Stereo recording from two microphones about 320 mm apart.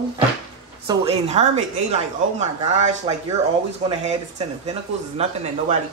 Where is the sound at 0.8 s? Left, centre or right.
Centre.